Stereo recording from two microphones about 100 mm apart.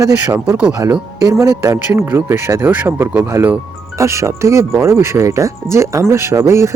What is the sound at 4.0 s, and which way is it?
Speech, 30° right (ahead or behind).